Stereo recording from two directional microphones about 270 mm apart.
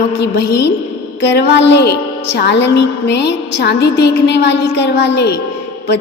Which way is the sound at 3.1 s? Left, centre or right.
Left.